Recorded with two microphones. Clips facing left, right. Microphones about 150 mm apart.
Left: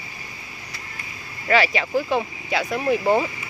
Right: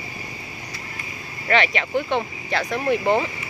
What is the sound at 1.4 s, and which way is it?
Speech, 5° left (ahead or behind).